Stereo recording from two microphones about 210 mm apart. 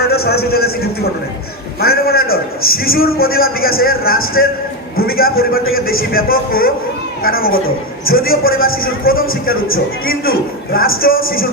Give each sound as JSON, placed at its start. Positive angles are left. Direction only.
{"t": 0.1, "sound": "speech", "side_deg": 45}
{"t": 1.8, "sound": "a man's voice", "side_deg": 45}